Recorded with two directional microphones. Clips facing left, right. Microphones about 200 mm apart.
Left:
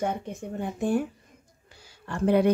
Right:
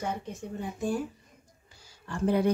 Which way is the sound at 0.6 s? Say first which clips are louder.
Left 5 dB; 60° left (ahead or behind).